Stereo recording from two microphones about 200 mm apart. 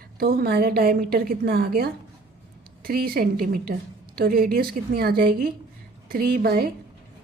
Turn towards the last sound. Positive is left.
turn(degrees=-50)  # may be behind; listen again after turning